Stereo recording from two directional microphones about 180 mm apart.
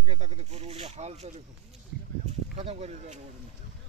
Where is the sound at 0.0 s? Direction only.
35° right (ahead or behind).